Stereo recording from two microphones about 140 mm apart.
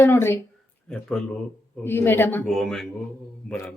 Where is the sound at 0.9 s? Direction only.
5° left (ahead or behind).